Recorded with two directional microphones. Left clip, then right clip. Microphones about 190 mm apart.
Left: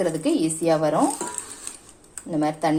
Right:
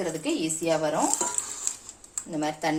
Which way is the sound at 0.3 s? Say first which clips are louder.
Left 4 dB; 30° left (ahead or behind).